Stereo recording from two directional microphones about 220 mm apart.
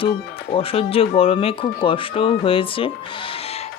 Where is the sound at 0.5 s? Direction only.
25° left (ahead or behind).